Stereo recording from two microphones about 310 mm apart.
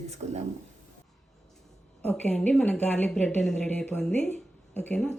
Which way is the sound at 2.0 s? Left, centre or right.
Centre.